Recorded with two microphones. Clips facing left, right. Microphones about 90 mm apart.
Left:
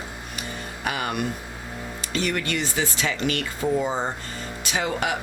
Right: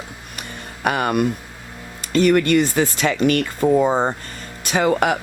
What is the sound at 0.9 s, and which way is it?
Music, 55° right (ahead or behind).